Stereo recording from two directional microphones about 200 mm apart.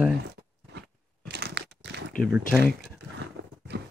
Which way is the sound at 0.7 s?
55° right (ahead or behind).